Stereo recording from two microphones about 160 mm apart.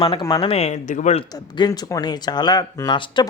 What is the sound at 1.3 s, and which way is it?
Speech, 25° left (ahead or behind).